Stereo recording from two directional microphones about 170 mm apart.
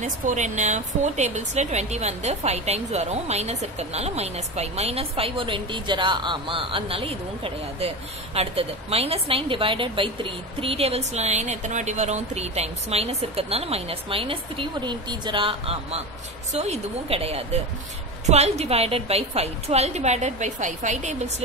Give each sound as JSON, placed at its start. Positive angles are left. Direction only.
{"t": 0.0, "sound": "speech", "side_deg": -45}